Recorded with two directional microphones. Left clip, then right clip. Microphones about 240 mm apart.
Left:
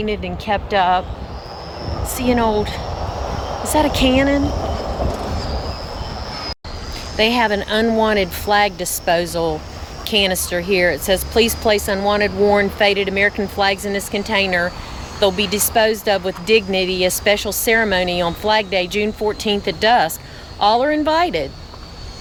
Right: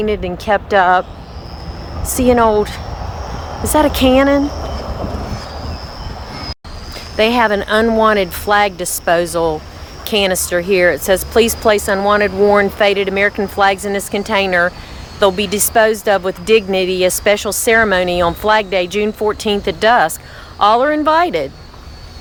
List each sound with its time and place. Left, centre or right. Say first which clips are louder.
0.0 s speech: right 5 dB; centre
2.1 s speech: right 6 dB; centre
7.2 s speech: right 4 dB; centre